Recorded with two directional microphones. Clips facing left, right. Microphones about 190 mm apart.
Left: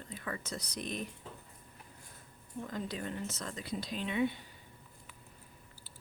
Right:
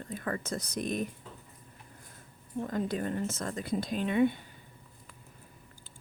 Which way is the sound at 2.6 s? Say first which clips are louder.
Right 7 dB; 50° right (ahead or behind).